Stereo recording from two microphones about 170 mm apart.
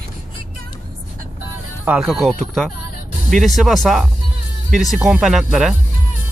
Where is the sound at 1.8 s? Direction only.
5° right (ahead or behind).